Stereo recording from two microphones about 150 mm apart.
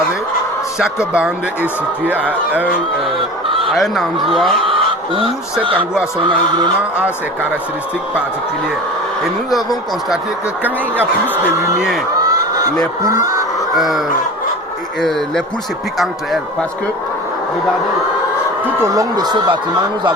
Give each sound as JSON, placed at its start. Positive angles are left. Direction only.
{"t": 2.0, "sound": "speech", "side_deg": -10}
{"t": 3.8, "sound": "speech", "side_deg": 0}
{"t": 4.6, "sound": "fowl", "side_deg": -35}
{"t": 6.1, "sound": "speech", "side_deg": -30}
{"t": 10.6, "sound": "speech", "side_deg": -10}
{"t": 12.3, "sound": "fowl", "side_deg": -25}
{"t": 13.1, "sound": "speech", "side_deg": -25}
{"t": 13.7, "sound": "speech", "side_deg": 0}
{"t": 18.6, "sound": "speech", "side_deg": -20}